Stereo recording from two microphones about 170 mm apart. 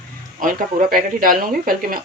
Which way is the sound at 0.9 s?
55° right (ahead or behind).